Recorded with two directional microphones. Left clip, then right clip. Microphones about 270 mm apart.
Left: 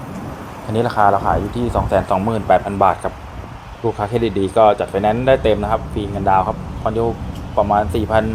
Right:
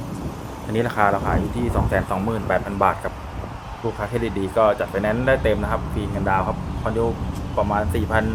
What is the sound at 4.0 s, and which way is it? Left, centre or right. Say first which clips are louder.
Speech: left 7 dB; centre.